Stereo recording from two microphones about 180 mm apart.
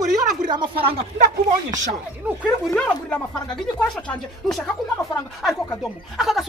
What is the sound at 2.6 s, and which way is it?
Speech, 5° left (ahead or behind).